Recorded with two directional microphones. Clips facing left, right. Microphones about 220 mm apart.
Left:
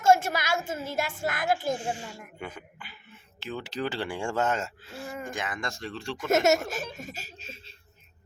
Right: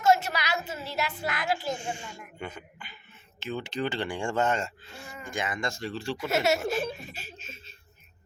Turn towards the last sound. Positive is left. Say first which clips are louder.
# even
turn(degrees=30)  # may be behind; listen again after turning